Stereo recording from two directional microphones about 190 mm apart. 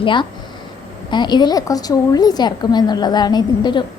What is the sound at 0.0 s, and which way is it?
A woman's voice, 25° left (ahead or behind).